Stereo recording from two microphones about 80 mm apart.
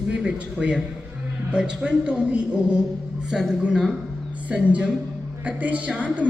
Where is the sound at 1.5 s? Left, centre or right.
Centre.